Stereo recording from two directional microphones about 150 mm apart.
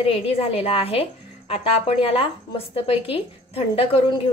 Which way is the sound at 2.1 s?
40° left (ahead or behind).